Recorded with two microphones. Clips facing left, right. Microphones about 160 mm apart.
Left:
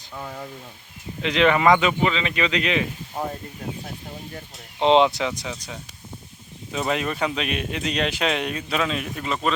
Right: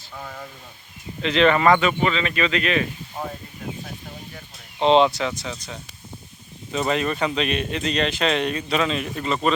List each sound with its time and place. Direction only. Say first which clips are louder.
1.2 s speech: right 1 dB; 15° left (ahead or behind)
4.8 s speech: even; 15° left (ahead or behind)